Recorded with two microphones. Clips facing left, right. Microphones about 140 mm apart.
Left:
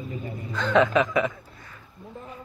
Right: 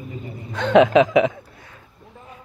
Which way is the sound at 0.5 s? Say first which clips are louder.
Right 7 dB; 75° right (ahead or behind).